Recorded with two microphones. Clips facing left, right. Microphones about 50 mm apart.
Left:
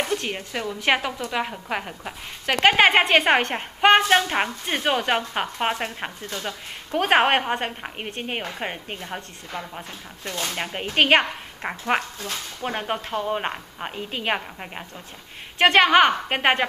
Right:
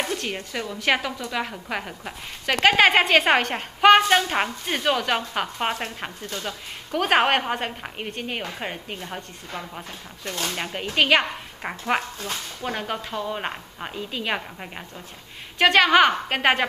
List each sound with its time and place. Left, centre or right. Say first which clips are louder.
0.1 s speech: left 2 dB; centre
3.0 s speech: even; centre
3.3 s a woman's voice: even; centre
4.9 s speech: left 1 dB; left
5.4 s speech: left 1 dB; centre
6.9 s speech: left 1 dB; left
8.2 s a woman's voice: left 2 dB; left
8.9 s speech: left 1 dB; centre
12.6 s speech: left 2 dB; centre
13.4 s speech: left 2 dB; centre
13.9 s a woman's voice: left 1 dB; left
14.3 s speech: left 2 dB; centre
15.6 s speech: left 1 dB; left
15.9 s speech: even; centre